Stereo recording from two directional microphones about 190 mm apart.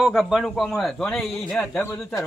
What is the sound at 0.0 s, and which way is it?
Speech, centre (ahead or behind).